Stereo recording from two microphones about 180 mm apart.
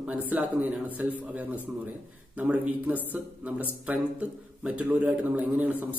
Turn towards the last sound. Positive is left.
turn(degrees=-10)  # may be behind; listen again after turning